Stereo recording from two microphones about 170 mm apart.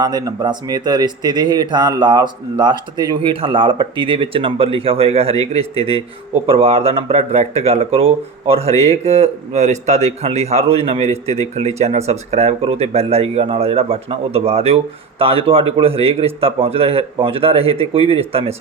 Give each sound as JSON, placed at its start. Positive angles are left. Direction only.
{"t": 0.0, "sound": "a man's voice", "side_deg": -20}